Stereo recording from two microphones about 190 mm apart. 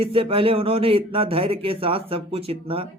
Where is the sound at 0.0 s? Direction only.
30° right (ahead or behind).